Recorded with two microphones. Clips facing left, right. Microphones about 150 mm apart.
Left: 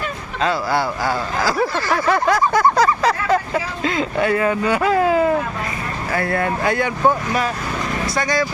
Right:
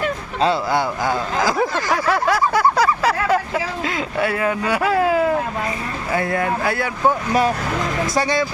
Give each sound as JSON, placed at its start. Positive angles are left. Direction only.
{"t": 0.4, "sound": "speech", "side_deg": -20}
{"t": 2.0, "sound": "speech", "side_deg": -5}
{"t": 6.1, "sound": "speech", "side_deg": -15}
{"t": 6.4, "sound": "speech", "side_deg": -5}
{"t": 8.2, "sound": "speech", "side_deg": -30}